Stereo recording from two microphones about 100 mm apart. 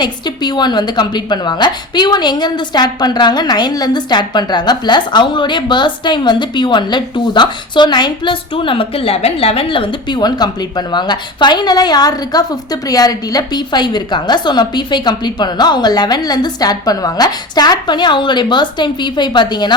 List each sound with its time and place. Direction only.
0.0 s a woman's voice: 45° left (ahead or behind)